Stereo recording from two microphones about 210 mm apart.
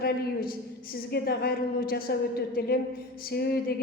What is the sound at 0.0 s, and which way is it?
A woman's voice, 45° left (ahead or behind).